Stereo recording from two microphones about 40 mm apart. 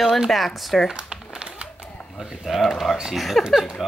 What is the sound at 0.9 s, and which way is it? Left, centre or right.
Crumpling, right.